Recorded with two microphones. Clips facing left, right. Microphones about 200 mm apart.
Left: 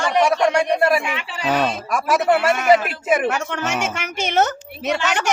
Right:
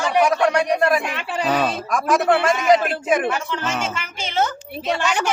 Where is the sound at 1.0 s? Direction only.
60° right (ahead or behind).